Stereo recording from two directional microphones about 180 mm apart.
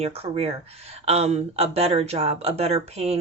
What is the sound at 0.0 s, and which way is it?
Speech, 35° right (ahead or behind).